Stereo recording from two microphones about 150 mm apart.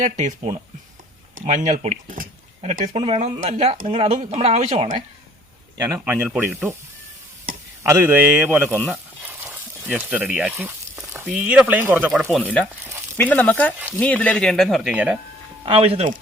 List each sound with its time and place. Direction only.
0.0 s speech: 55° right (ahead or behind)
2.9 s speech: 40° right (ahead or behind)
5.7 s speech: 20° right (ahead or behind)
7.9 s speech: 15° right (ahead or behind)
8.7 s speech: 5° left (ahead or behind)
9.2 s a sound: 15° right (ahead or behind)
9.8 s speech: 5° right (ahead or behind)
11.3 s speech: 5° right (ahead or behind)
12.4 s speech: 10° left (ahead or behind)
14.9 s speech: 10° right (ahead or behind)
15.6 s speech: 40° right (ahead or behind)